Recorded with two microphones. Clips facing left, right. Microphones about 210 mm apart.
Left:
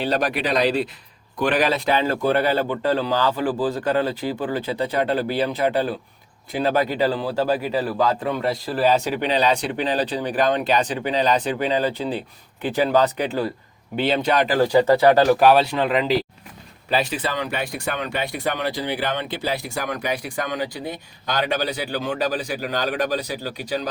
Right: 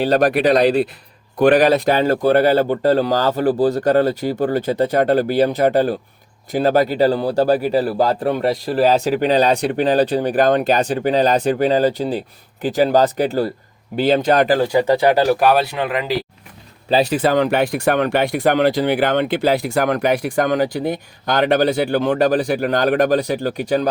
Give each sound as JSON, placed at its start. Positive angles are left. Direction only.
{"t": 0.0, "sound": "speech", "side_deg": -50}
{"t": 1.5, "sound": "speech", "side_deg": -40}
{"t": 14.6, "sound": "speech", "side_deg": -15}
{"t": 16.9, "sound": "speech", "side_deg": -40}
{"t": 18.9, "sound": "speech", "side_deg": -50}